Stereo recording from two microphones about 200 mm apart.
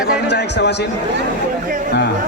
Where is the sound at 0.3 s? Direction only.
60° left (ahead or behind).